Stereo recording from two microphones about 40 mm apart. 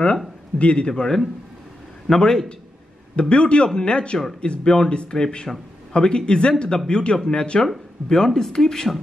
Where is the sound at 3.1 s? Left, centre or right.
Left.